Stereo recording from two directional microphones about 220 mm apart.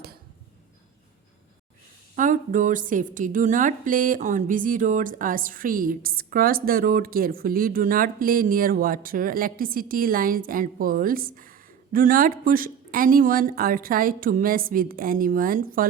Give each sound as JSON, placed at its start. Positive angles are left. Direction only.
{"t": 2.1, "sound": "a woman's voice", "side_deg": -35}